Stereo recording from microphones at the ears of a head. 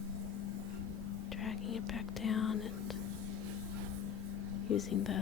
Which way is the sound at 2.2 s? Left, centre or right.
Left.